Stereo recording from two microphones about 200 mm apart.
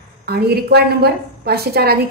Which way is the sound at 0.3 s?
55° right (ahead or behind).